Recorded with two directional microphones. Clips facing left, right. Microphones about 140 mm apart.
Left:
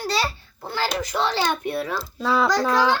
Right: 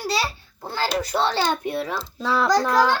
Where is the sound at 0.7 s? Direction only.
35° right (ahead or behind).